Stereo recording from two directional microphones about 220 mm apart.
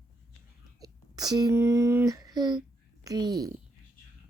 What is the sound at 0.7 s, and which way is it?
Speech, 15° right (ahead or behind).